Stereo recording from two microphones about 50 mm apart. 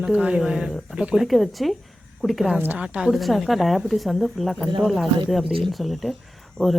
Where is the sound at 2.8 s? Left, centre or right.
Centre.